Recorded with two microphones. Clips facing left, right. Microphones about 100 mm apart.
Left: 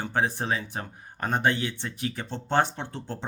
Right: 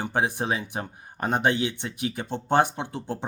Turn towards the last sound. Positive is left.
turn(degrees=-15)  # may be behind; listen again after turning